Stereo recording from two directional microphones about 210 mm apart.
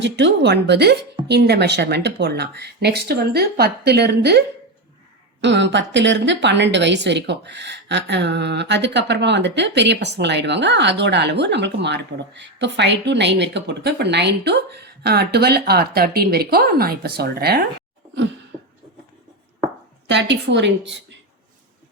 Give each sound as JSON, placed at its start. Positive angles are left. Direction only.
{"t": 0.0, "sound": "a woman's voice", "side_deg": -55}
{"t": 20.1, "sound": "a woman's voice", "side_deg": -60}